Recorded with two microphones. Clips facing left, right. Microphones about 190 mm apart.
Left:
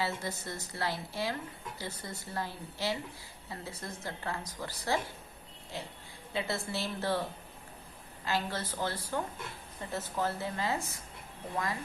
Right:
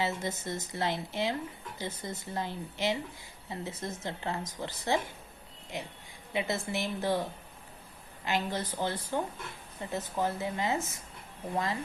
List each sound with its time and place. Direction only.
0.0 s a woman's voice: 20° right (ahead or behind)